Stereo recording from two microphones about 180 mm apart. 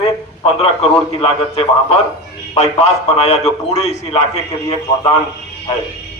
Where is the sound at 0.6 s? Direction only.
35° left (ahead or behind).